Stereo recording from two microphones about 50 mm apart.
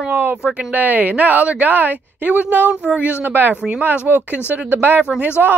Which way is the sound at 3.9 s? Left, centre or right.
Right.